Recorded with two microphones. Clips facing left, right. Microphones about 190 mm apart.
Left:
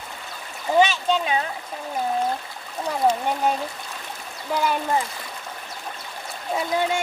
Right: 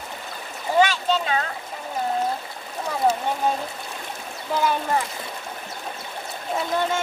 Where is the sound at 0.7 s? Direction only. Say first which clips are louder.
Left 1 dB; 15° left (ahead or behind).